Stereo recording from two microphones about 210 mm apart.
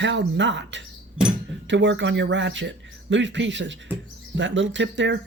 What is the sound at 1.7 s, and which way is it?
Speech, 60° right (ahead or behind).